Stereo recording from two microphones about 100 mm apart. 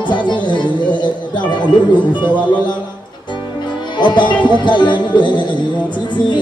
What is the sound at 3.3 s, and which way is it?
Music, 50° left (ahead or behind).